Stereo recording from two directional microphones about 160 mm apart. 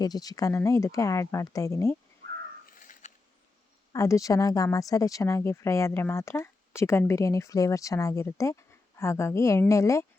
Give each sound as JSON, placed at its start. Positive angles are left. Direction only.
{"t": 0.0, "sound": "a woman's voice", "side_deg": 25}
{"t": 2.6, "sound": "crow", "side_deg": 55}
{"t": 3.9, "sound": "a woman's voice", "side_deg": 20}